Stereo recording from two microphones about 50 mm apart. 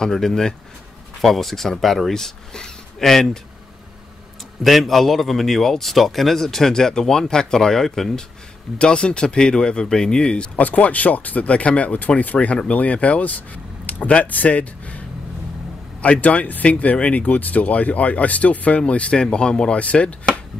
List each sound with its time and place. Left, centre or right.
0.0 s a man's voice: centre
4.6 s a man's voice: centre
8.7 s speech: centre
10.6 s speech: left